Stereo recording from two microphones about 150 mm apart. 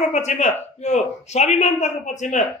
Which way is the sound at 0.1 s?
50° left (ahead or behind).